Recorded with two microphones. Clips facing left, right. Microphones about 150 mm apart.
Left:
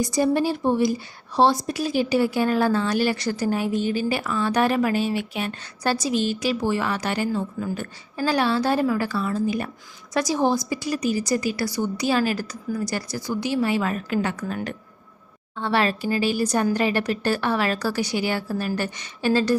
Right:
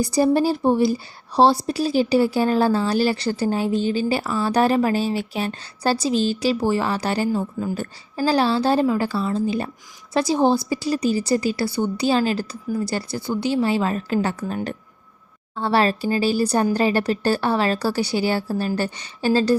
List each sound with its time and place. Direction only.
0.0 s a woman's voice: 35° right (ahead or behind)